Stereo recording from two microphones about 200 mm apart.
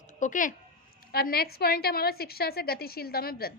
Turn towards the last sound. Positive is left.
turn(degrees=50)  # may be behind; listen again after turning